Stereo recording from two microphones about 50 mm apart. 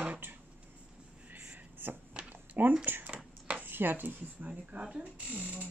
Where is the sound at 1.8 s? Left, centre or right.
Right.